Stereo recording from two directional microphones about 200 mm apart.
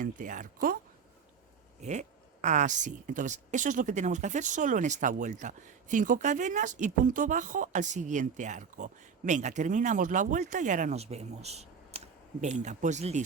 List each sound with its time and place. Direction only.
0.0 s speech: 40° right (ahead or behind)
1.8 s speech: 35° right (ahead or behind)